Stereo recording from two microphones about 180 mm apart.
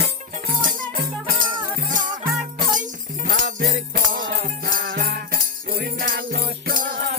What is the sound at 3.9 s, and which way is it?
Music, 50° right (ahead or behind).